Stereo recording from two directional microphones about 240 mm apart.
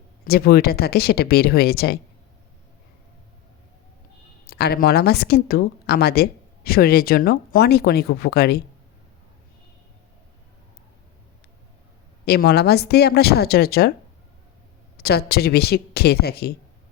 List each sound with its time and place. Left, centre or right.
0.3 s speech: left
4.4 s speech: left
12.2 s speech: left
14.9 s speech: left